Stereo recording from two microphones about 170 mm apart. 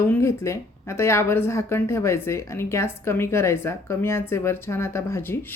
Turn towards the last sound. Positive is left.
turn(degrees=15)  # may be behind; listen again after turning